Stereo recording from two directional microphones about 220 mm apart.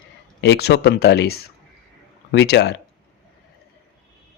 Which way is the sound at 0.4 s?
50° left (ahead or behind).